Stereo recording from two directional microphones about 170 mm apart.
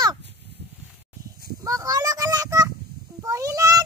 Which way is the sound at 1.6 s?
20° right (ahead or behind).